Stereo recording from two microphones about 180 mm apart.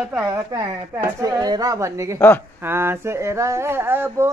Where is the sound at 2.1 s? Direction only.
10° left (ahead or behind).